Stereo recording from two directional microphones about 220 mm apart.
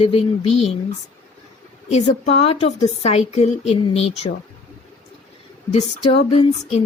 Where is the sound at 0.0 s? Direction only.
25° left (ahead or behind).